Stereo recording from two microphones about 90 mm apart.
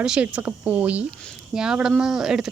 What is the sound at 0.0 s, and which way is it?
Speech, 10° right (ahead or behind).